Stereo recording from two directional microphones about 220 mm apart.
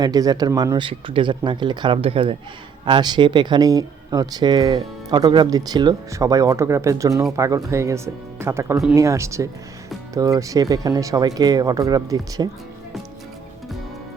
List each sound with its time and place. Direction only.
0.0 s speech: 15° right (ahead or behind)